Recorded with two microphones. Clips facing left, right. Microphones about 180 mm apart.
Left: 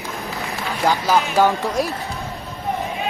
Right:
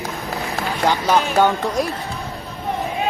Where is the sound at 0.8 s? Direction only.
Centre (ahead or behind).